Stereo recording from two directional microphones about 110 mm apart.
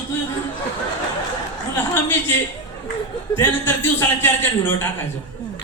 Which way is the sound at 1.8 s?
20° left (ahead or behind).